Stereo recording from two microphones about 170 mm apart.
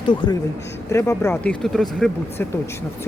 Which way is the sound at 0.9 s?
15° left (ahead or behind).